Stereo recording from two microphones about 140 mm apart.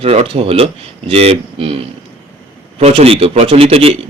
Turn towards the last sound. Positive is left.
turn(degrees=-45)  # may be behind; listen again after turning